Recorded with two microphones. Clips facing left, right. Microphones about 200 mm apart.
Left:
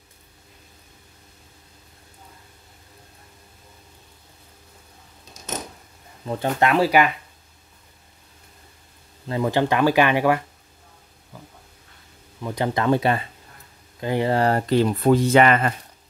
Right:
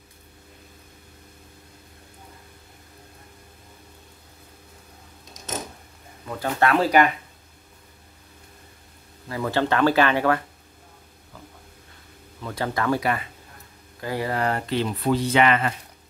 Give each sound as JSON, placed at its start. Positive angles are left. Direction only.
{"t": 6.2, "sound": "speech", "side_deg": 20}
{"t": 9.3, "sound": "speech", "side_deg": 20}
{"t": 12.4, "sound": "speech", "side_deg": 15}